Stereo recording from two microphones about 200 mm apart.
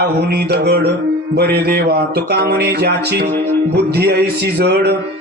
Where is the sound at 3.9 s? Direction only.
55° right (ahead or behind).